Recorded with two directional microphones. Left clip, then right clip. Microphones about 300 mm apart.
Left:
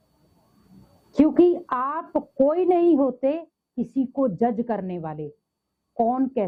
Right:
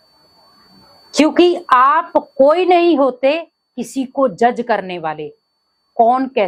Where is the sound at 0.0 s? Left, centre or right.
Centre.